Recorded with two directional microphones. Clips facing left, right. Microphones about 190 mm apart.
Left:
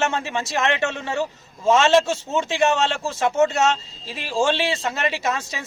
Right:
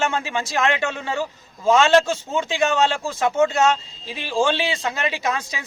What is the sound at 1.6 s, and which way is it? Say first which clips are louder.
Speech: right 1 dB; 5° left (ahead or behind).